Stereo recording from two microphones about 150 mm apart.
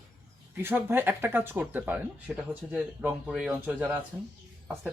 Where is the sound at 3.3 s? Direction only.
5° right (ahead or behind).